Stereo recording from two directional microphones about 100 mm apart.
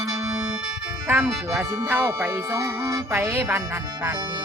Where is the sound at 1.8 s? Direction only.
20° right (ahead or behind).